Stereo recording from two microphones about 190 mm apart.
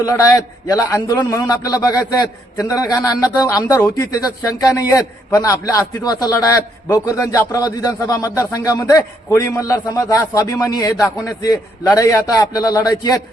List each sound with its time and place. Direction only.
0.0 s a man's voice: 20° left (ahead or behind)